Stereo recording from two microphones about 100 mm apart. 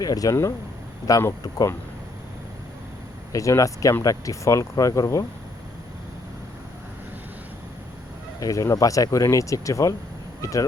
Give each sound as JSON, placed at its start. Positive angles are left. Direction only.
{"t": 0.0, "sound": "speech", "side_deg": 35}
{"t": 3.3, "sound": "speech", "side_deg": 35}
{"t": 8.4, "sound": "speech", "side_deg": 35}